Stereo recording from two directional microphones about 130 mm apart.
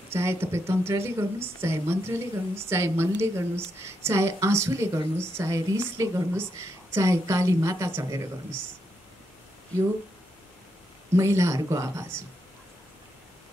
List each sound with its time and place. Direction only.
0.1 s a woman's voice: 20° right (ahead or behind)
11.1 s a woman's voice: 20° right (ahead or behind)